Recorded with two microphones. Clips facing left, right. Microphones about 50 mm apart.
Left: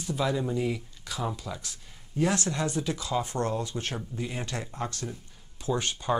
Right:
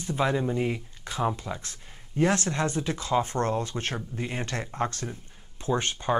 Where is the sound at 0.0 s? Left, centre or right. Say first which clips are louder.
Right 2 dB; right.